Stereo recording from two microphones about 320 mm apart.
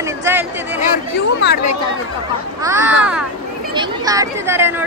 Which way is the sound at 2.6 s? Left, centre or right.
Centre.